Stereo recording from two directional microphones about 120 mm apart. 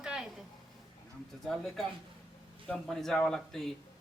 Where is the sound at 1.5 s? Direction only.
Centre (ahead or behind).